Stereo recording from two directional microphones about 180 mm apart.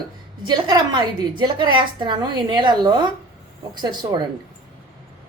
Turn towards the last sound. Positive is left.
turn(degrees=-25)  # may be behind; listen again after turning